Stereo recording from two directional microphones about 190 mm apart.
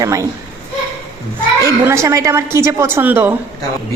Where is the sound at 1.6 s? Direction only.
15° right (ahead or behind).